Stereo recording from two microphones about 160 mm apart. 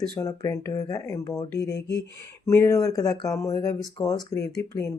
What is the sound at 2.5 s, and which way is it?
Speech, 20° left (ahead or behind).